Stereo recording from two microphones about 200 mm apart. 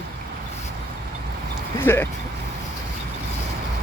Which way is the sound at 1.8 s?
10° left (ahead or behind).